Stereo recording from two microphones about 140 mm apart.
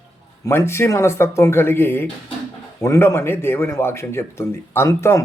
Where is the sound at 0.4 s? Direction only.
20° left (ahead or behind).